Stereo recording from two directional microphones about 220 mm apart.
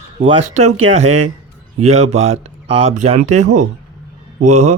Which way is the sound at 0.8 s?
30° right (ahead or behind).